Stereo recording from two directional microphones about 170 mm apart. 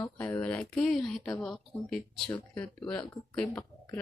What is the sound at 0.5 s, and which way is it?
A woman's voice, 5° left (ahead or behind).